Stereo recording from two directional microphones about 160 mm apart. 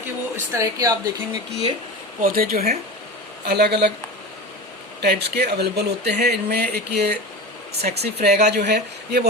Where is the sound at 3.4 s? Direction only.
90° right.